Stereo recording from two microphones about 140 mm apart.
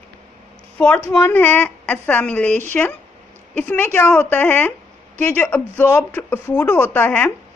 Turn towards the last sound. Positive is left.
turn(degrees=10)  # may be behind; listen again after turning